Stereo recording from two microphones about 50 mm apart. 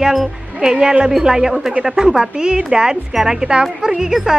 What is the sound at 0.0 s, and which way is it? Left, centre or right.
Speech, centre.